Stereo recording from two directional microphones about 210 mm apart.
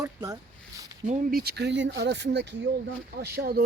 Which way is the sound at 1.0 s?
45° right (ahead or behind).